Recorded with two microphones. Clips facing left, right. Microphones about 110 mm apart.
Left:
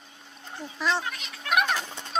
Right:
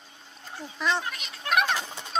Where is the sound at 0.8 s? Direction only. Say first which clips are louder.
Even; centre (ahead or behind).